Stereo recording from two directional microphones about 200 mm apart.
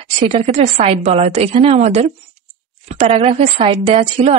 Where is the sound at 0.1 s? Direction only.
30° right (ahead or behind).